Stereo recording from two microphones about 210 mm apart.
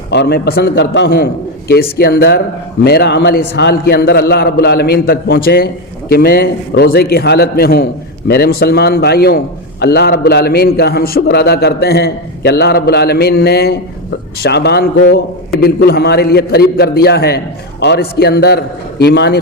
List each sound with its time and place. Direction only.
0.1 s a man's voice: 50° left (ahead or behind)